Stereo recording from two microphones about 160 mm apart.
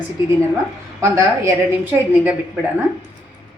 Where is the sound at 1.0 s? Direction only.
15° right (ahead or behind).